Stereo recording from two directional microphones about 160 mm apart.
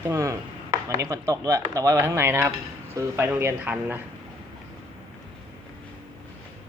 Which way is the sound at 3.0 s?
15° right (ahead or behind).